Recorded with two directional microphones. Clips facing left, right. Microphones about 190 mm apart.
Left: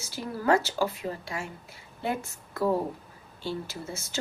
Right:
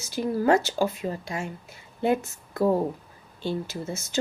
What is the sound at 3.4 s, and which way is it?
Speech, 20° right (ahead or behind).